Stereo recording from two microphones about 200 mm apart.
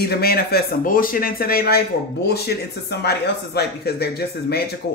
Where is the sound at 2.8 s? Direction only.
55° left (ahead or behind).